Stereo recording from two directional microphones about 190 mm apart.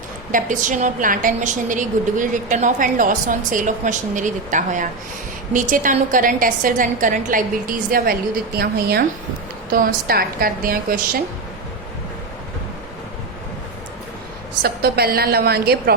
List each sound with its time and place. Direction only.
0.3 s a woman's voice: 45° right (ahead or behind)
14.6 s a woman's voice: 55° right (ahead or behind)